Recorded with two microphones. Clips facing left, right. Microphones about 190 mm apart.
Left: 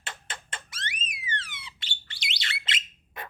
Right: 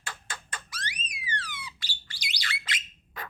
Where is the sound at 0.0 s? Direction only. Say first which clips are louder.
Even; 25° left (ahead or behind).